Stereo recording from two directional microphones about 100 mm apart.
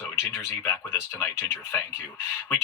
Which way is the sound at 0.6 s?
25° left (ahead or behind).